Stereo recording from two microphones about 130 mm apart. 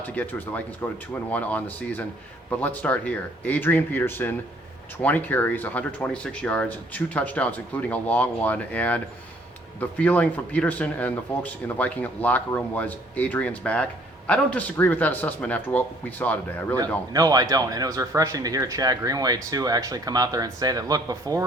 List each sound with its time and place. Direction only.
0.0 s speech: 15° left (ahead or behind)
10.0 s speech: 10° left (ahead or behind)
16.7 s a man's voice: 30° right (ahead or behind)